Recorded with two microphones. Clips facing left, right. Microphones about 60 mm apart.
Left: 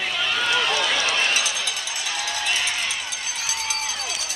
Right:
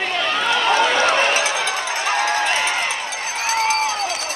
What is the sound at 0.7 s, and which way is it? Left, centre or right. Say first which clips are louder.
Run: right 7 dB; right.